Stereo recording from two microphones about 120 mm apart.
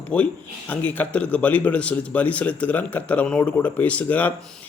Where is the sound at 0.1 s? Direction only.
10° left (ahead or behind).